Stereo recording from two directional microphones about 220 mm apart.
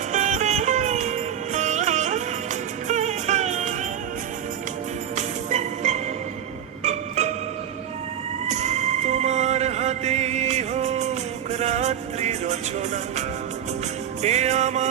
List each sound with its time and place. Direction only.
0.1 s music: 35° right (ahead or behind)
5.1 s music: 30° right (ahead or behind)
7.2 s music: 30° right (ahead or behind)
8.4 s a sound: 30° right (ahead or behind)
14.2 s music: 30° right (ahead or behind)